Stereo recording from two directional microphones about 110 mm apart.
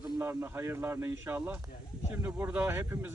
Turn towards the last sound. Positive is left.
turn(degrees=-20)  # may be behind; listen again after turning